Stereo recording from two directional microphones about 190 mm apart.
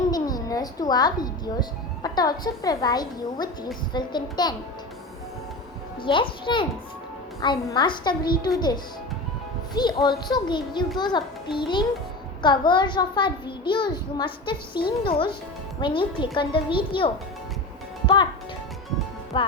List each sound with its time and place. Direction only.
0.1 s a sound: 20° left (ahead or behind)
2.0 s a child's voice: 20° left (ahead or behind)
6.0 s a child's voice: 25° left (ahead or behind)
15.8 s a child's voice: 25° left (ahead or behind)
19.3 s a child's voice: 25° left (ahead or behind)